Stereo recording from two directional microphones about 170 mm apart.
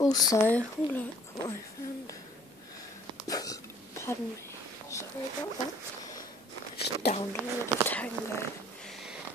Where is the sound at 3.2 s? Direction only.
20° left (ahead or behind).